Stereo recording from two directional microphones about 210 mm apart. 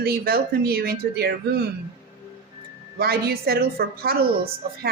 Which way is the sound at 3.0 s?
45° right (ahead or behind).